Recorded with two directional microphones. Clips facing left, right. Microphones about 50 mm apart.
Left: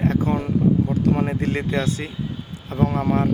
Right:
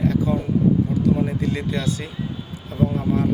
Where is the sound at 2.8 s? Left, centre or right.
Left.